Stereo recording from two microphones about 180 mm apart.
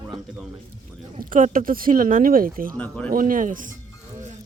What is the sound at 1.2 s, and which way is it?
Speech, 50° right (ahead or behind).